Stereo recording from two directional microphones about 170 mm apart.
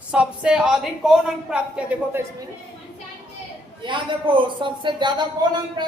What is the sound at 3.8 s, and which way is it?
A man's voice, 30° right (ahead or behind).